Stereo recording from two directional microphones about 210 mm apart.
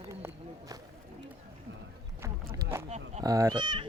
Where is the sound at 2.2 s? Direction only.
15° right (ahead or behind).